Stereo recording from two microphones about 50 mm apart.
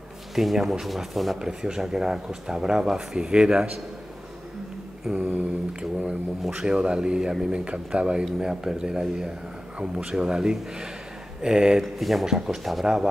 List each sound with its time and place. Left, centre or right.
0.4 s speech: centre
5.0 s a sound: centre
6.5 s speech: centre
10.1 s speech: centre